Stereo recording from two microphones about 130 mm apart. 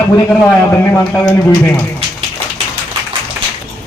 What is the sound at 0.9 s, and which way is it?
Speech, 15° left (ahead or behind).